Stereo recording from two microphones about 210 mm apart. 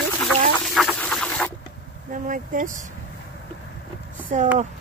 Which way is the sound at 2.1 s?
40° right (ahead or behind).